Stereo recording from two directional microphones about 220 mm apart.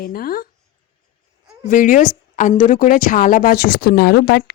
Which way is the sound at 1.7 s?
40° left (ahead or behind).